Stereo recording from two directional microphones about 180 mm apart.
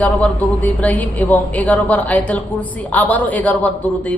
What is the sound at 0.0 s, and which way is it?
A man's voice, 5° left (ahead or behind).